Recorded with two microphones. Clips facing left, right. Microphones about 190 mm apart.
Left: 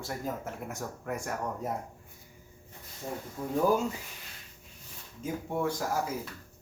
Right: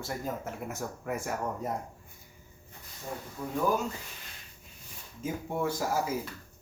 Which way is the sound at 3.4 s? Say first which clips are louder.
Left 3 dB; 25° left (ahead or behind).